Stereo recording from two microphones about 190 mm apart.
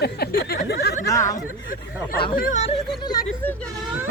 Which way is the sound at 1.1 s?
15° left (ahead or behind).